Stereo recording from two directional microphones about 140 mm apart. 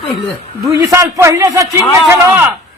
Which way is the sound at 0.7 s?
20° right (ahead or behind).